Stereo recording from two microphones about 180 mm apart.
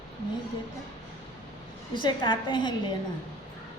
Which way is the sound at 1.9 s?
25° left (ahead or behind).